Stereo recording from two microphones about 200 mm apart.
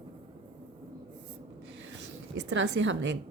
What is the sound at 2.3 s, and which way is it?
Speech, 60° right (ahead or behind).